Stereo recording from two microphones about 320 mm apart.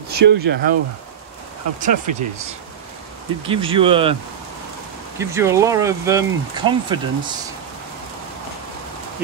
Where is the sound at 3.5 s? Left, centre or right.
Centre.